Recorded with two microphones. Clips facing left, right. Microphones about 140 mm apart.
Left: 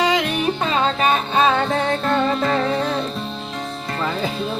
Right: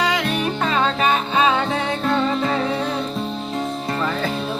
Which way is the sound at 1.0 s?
40° left (ahead or behind).